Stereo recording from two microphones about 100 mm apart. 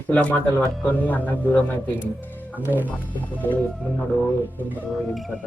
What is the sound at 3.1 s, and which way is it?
Music, 15° left (ahead or behind).